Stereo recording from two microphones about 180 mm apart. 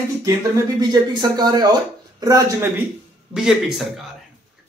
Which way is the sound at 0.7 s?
20° right (ahead or behind).